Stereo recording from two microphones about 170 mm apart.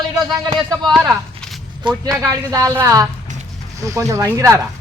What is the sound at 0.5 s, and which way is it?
Speech, 25° right (ahead or behind).